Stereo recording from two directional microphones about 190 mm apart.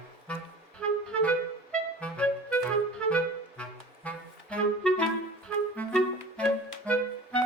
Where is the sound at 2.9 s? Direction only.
5° left (ahead or behind).